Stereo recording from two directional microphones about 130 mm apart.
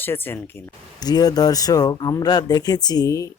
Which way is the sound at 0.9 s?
30° left (ahead or behind).